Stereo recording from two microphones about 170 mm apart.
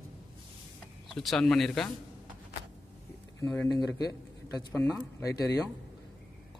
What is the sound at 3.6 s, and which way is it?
Speech, 25° left (ahead or behind).